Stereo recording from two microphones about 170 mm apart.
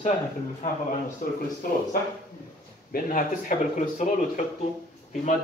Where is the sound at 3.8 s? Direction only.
45° left (ahead or behind).